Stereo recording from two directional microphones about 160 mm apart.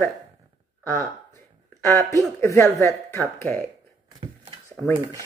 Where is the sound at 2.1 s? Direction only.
20° left (ahead or behind).